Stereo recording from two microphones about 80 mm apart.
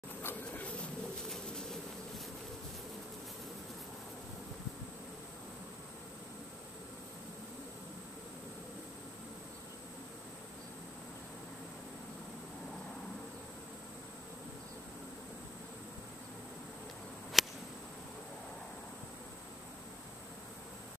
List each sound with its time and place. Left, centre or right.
0.5 s bird: centre
1.3 s bee: centre
17.4 s a sound: centre